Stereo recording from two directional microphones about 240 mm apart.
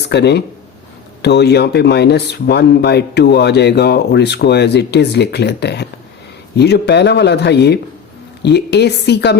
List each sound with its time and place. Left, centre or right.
0.1 s speech: left